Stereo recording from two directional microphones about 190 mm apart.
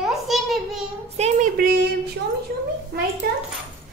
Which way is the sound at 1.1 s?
35° right (ahead or behind).